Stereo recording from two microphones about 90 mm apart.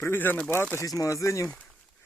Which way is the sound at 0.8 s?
40° left (ahead or behind).